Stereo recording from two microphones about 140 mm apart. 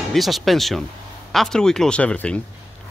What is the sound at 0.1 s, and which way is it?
Speech, centre (ahead or behind).